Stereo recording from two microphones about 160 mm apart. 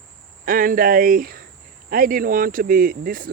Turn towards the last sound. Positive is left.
turn(degrees=-60)  # may be behind; listen again after turning